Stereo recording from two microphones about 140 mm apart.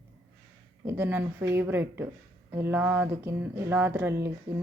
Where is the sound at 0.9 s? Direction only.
15° right (ahead or behind).